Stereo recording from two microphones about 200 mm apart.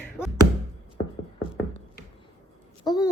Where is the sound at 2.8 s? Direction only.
20° left (ahead or behind).